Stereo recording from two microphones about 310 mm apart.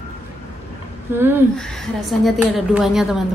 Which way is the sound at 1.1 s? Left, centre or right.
Centre.